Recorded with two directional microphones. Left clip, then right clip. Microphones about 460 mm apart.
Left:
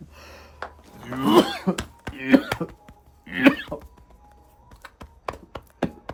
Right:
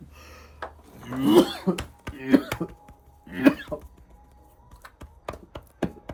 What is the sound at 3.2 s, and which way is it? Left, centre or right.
Cough, centre.